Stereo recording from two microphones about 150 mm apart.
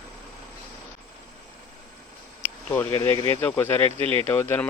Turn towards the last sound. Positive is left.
turn(degrees=15)  # may be behind; listen again after turning